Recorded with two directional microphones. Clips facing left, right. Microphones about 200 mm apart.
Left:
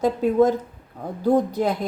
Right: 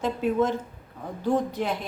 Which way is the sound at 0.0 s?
40° left (ahead or behind).